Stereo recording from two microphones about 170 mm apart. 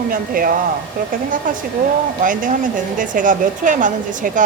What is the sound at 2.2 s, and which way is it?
A woman's voice, 50° right (ahead or behind).